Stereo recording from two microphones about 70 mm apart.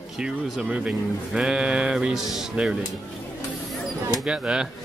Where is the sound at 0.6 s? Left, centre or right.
Centre.